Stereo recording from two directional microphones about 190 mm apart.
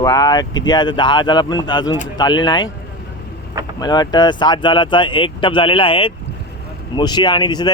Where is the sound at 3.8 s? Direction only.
20° left (ahead or behind).